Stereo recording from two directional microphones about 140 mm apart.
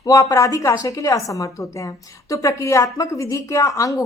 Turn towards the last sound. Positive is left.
turn(degrees=25)  # may be behind; listen again after turning